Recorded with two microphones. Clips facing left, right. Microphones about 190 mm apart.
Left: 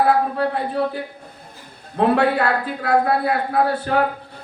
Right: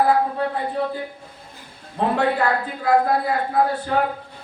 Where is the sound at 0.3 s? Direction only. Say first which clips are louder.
Left 2 dB; 70° left (ahead or behind).